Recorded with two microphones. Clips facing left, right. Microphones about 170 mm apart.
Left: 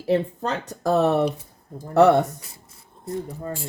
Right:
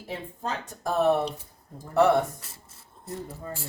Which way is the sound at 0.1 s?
75° left (ahead or behind).